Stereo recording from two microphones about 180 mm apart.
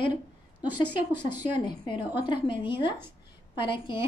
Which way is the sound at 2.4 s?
30° left (ahead or behind).